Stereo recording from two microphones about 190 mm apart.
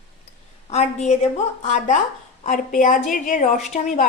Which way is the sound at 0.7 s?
35° left (ahead or behind).